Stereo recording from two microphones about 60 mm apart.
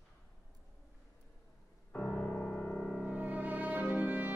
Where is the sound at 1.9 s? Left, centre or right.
Left.